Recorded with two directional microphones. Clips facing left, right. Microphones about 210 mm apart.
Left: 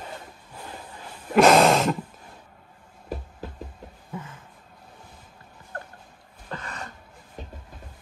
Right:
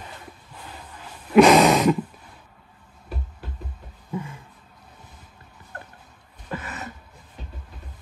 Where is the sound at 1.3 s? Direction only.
Centre (ahead or behind).